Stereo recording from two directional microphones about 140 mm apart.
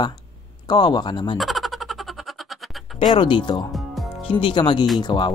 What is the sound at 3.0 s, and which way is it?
Speech, 35° left (ahead or behind).